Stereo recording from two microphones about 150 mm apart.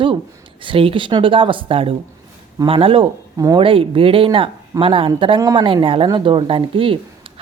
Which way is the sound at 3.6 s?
35° right (ahead or behind).